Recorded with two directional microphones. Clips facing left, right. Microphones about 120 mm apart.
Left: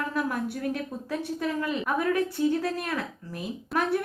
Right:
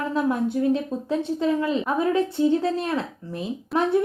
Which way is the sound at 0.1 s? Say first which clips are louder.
Right 6 dB; 25° right (ahead or behind).